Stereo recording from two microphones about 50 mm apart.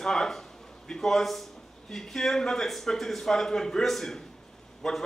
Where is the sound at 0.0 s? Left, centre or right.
Centre.